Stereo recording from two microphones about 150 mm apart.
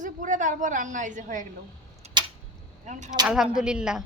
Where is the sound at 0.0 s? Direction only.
55° right (ahead or behind).